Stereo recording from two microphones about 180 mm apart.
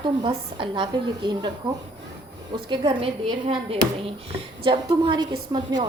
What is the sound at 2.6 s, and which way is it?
A woman's voice, 30° right (ahead or behind).